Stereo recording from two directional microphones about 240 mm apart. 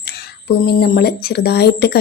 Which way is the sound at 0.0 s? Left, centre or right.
Left.